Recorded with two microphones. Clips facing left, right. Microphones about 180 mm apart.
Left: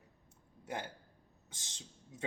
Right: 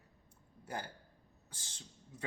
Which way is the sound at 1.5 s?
25° left (ahead or behind).